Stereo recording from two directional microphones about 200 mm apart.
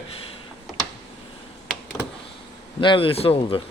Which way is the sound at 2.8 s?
25° left (ahead or behind).